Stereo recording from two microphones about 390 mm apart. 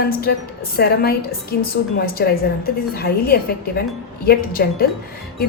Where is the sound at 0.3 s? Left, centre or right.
Left.